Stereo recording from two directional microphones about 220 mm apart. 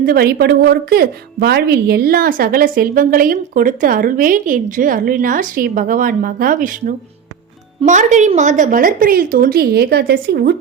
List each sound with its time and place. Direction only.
0.0 s a woman's voice: 45° right (ahead or behind)